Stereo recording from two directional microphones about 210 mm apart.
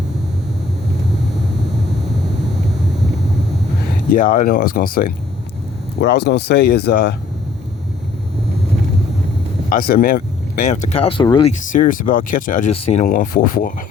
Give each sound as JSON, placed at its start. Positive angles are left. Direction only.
{"t": 4.1, "sound": "speech", "side_deg": 40}
{"t": 9.6, "sound": "speech", "side_deg": 40}
{"t": 11.7, "sound": "speech", "side_deg": 40}